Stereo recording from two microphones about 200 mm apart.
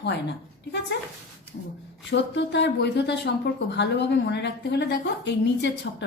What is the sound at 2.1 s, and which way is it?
A woman's voice, 60° left (ahead or behind).